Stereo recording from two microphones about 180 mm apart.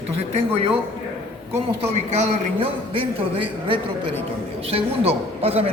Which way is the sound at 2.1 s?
35° right (ahead or behind).